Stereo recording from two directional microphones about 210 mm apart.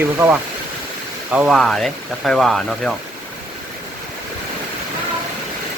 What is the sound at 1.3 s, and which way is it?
Speech, 5° right (ahead or behind).